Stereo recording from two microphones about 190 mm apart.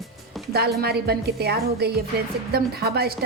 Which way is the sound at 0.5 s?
55° right (ahead or behind).